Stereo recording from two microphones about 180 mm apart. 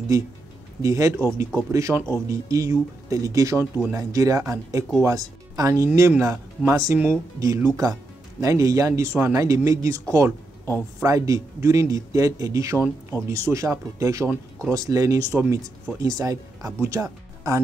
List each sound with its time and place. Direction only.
0.8 s speech: 15° right (ahead or behind)
11.0 s speech: 20° right (ahead or behind)